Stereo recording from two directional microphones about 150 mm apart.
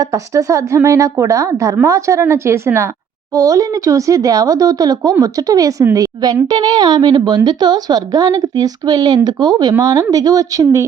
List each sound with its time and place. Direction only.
0.0 s a woman's voice: 20° right (ahead or behind)